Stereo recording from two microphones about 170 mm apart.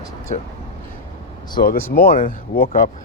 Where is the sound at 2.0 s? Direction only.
55° left (ahead or behind).